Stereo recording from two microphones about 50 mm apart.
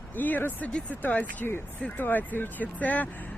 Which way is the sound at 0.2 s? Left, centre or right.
Left.